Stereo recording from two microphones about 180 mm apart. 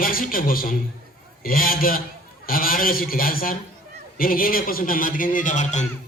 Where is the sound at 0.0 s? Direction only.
55° left (ahead or behind).